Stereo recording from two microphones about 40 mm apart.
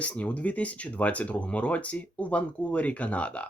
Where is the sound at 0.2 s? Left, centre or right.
Left.